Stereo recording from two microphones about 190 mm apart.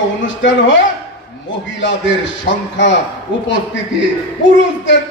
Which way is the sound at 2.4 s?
70° left (ahead or behind).